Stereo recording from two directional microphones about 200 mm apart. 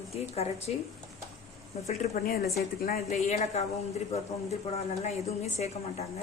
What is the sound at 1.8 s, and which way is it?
Speech, 35° left (ahead or behind).